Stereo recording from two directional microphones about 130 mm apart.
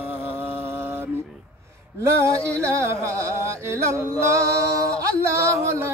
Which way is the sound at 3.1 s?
20° right (ahead or behind).